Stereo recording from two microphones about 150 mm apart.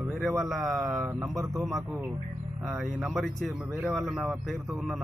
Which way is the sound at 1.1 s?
20° right (ahead or behind).